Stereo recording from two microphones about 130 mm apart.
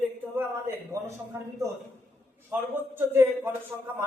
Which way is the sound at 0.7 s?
20° right (ahead or behind).